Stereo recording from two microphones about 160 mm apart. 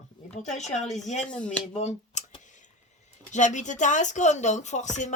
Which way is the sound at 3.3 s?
50° left (ahead or behind).